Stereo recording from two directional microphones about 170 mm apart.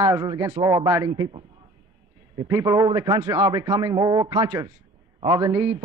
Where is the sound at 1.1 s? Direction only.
30° right (ahead or behind).